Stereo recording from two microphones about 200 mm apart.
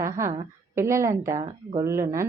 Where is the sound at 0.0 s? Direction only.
15° right (ahead or behind).